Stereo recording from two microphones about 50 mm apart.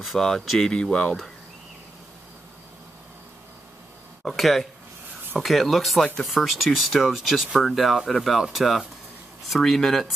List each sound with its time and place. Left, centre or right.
0.1 s speech: centre
0.6 s speech: centre
4.2 s speech: centre
7.6 s speech: centre